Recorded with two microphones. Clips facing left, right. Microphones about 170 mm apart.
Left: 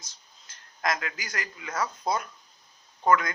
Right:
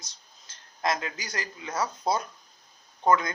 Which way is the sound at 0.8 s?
25° right (ahead or behind).